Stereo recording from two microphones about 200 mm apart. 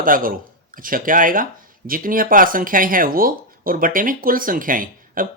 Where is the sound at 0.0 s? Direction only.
45° right (ahead or behind).